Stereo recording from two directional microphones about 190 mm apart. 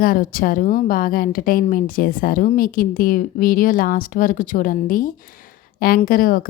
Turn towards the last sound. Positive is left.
turn(degrees=50)  # may be behind; listen again after turning